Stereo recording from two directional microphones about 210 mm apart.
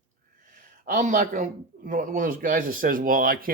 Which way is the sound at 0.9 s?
40° right (ahead or behind).